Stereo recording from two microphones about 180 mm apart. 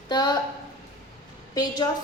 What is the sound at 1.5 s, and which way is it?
Speech, 20° left (ahead or behind).